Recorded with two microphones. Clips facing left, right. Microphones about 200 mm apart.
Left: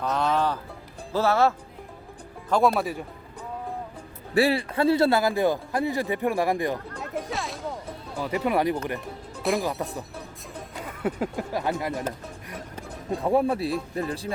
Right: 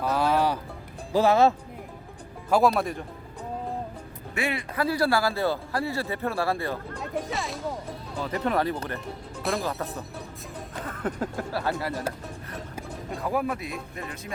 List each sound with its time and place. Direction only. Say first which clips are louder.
0.0 s music: right 1 dB; 5° right (ahead or behind)
1.1 s speech: right 2 dB; 15° right (ahead or behind)
2.5 s speech: even; centre (ahead or behind)
4.4 s speech: left 7 dB; 35° left (ahead or behind); by 6.7 s 15° left (ahead or behind)
7.0 s music: even; centre (ahead or behind)
8.2 s speech: left 2 dB; 10° left (ahead or behind)
9.4 s speech: left 3 dB; centre (ahead or behind)
10.8 s speech: left 2 dB; 10° left (ahead or behind)
13.1 s speech: left 6 dB; 30° left (ahead or behind)